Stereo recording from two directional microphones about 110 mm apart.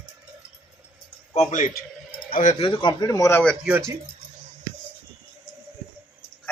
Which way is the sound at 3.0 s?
30° left (ahead or behind).